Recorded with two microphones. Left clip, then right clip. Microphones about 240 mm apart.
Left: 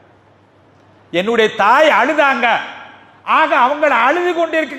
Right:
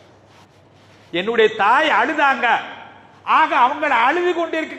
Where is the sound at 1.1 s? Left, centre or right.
Left.